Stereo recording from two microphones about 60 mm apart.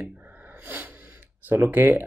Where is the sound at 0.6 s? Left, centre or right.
Right.